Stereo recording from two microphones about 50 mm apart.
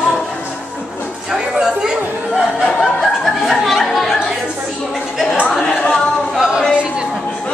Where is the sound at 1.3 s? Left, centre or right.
Centre.